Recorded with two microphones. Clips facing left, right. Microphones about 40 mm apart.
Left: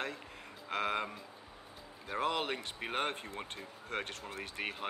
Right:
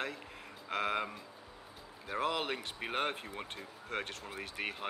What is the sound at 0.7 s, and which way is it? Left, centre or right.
Speech, centre.